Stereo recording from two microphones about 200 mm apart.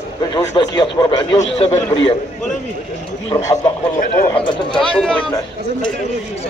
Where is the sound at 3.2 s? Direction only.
25° left (ahead or behind).